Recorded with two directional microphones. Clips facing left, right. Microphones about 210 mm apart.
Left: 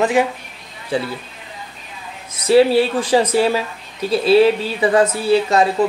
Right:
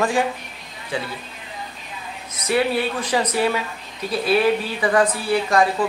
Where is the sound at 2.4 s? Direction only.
30° left (ahead or behind).